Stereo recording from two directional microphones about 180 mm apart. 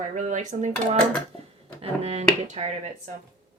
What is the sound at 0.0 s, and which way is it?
Speech, 45° right (ahead or behind).